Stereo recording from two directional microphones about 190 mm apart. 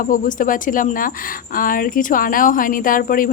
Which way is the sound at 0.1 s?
45° left (ahead or behind).